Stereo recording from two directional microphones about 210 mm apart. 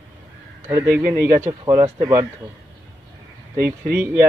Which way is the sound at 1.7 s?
15° right (ahead or behind).